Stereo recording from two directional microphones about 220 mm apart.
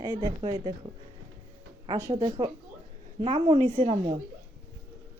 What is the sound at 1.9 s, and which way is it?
Speech, 15° right (ahead or behind).